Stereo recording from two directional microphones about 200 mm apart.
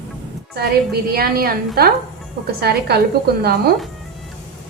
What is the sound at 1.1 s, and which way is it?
Speech, 50° right (ahead or behind).